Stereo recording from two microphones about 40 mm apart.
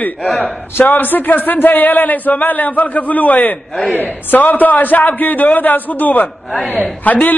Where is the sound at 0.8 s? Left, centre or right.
Left.